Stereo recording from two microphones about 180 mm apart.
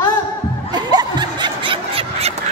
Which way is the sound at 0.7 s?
25° right (ahead or behind).